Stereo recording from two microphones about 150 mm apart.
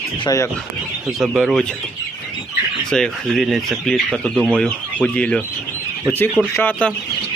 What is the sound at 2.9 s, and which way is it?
Speech, 5° left (ahead or behind).